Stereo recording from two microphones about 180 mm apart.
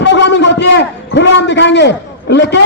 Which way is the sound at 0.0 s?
75° left (ahead or behind).